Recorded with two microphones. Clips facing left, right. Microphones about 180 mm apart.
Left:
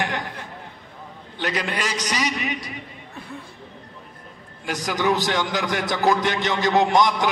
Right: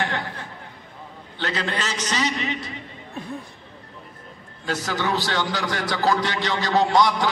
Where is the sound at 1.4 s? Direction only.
15° left (ahead or behind).